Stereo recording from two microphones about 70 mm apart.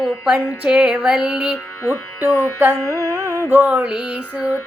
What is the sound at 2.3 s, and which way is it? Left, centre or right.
Music, left.